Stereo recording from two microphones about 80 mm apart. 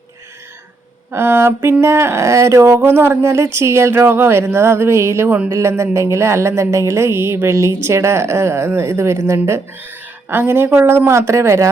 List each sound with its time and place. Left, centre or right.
1.1 s a woman's voice: right